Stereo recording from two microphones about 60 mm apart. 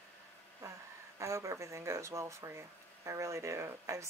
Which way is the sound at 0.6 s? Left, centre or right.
Right.